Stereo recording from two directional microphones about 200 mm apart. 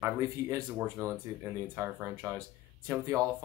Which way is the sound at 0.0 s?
15° right (ahead or behind).